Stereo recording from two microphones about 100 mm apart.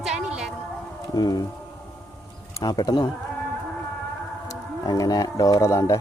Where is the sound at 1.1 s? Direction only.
40° left (ahead or behind).